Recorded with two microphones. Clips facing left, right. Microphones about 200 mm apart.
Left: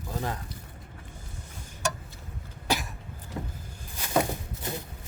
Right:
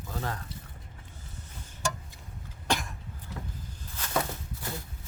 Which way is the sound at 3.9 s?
15° left (ahead or behind).